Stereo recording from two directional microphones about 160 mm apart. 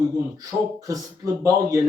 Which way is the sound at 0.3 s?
20° right (ahead or behind).